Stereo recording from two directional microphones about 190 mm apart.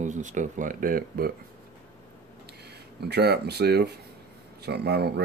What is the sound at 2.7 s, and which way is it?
A man's voice, 60° right (ahead or behind).